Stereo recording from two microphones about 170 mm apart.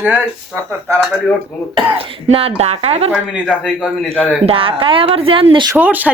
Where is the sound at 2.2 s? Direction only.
35° right (ahead or behind).